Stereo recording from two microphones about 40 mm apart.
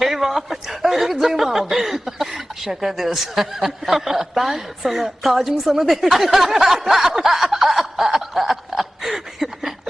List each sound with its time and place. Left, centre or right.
0.0 s speech: centre